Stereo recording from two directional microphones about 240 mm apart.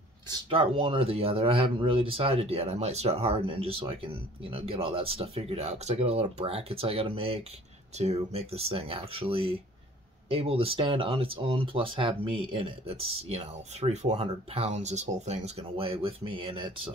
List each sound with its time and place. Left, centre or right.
0.5 s speech: right